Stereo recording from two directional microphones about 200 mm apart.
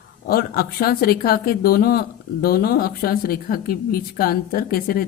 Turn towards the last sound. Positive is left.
turn(degrees=50)  # may be behind; listen again after turning